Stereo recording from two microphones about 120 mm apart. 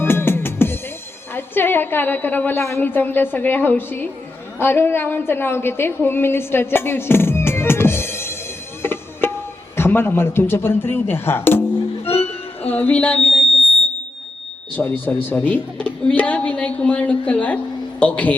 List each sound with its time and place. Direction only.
0.0 s music: 20° left (ahead or behind)
1.3 s a woman's voice: 15° left (ahead or behind)
8.8 s music: 20° left (ahead or behind)
9.7 s speech: 20° left (ahead or behind)
12.6 s music: 15° left (ahead or behind)
14.8 s a woman's voice: 15° left (ahead or behind)